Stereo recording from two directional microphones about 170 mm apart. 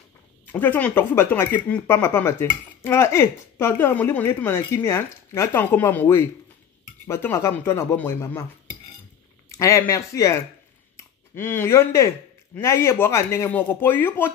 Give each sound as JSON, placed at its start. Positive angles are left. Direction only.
{"t": 0.5, "sound": "speech", "side_deg": 10}
{"t": 9.5, "sound": "speech", "side_deg": 15}